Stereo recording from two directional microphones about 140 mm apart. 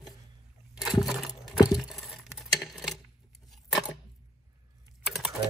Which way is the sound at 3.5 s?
Centre (ahead or behind).